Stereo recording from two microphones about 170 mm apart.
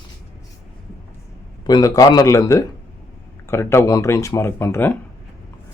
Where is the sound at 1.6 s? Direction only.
25° left (ahead or behind).